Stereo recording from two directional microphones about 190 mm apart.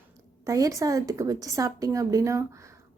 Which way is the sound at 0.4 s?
15° right (ahead or behind).